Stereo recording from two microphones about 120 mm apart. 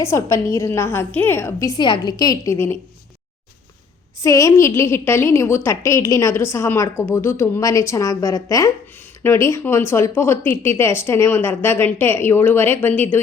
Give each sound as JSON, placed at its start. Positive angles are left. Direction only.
{"t": 0.0, "sound": "speech", "side_deg": 20}
{"t": 1.8, "sound": "a woman's voice", "side_deg": 35}
{"t": 4.2, "sound": "speech", "side_deg": 25}